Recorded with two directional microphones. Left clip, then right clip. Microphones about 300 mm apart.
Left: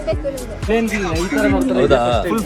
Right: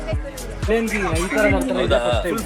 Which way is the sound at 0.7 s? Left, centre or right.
Centre.